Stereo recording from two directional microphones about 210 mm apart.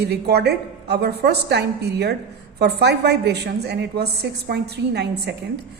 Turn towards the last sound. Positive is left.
turn(degrees=-50)  # may be behind; listen again after turning